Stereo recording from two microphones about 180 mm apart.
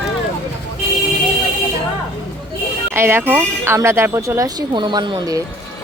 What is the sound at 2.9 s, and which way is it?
Speech, 15° right (ahead or behind).